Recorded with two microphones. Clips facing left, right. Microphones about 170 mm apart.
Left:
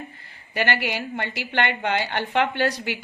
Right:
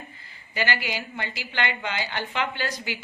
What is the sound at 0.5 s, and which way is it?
Speech, 60° left (ahead or behind).